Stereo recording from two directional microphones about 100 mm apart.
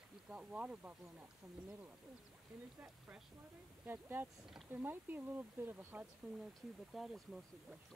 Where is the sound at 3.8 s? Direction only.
20° right (ahead or behind).